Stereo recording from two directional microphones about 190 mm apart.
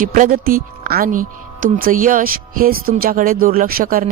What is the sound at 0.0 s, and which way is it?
Speech, 45° right (ahead or behind).